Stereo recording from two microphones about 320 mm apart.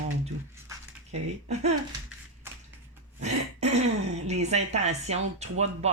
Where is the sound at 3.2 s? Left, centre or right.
Right.